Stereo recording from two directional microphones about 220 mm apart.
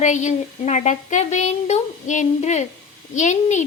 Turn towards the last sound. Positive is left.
turn(degrees=35)  # may be behind; listen again after turning